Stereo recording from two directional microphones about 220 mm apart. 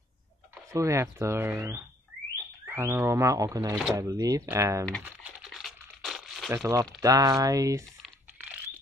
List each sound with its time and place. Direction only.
0.7 s speech: 15° right (ahead or behind)
5.0 s a sound: centre (ahead or behind)
6.5 s speech: 10° right (ahead or behind)
8.0 s typing: 5° right (ahead or behind)